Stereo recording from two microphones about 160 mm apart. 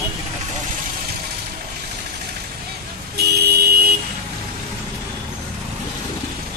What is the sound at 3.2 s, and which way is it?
Vehicle, 85° right.